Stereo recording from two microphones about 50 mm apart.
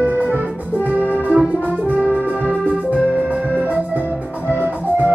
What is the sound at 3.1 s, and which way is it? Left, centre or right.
Organ, right.